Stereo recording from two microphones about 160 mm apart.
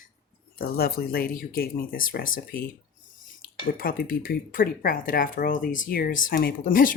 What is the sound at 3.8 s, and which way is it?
Speech, 65° left (ahead or behind).